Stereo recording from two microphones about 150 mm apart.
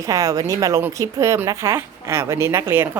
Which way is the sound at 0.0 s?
20° right (ahead or behind).